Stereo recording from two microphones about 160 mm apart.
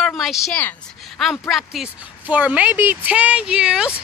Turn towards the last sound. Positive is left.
turn(degrees=-5)  # may be behind; listen again after turning